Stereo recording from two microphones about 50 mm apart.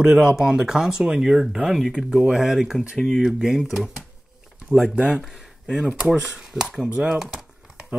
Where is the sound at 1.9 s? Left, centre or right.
Centre.